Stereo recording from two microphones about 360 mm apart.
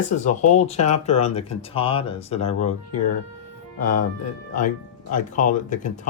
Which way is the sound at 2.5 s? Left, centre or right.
Left.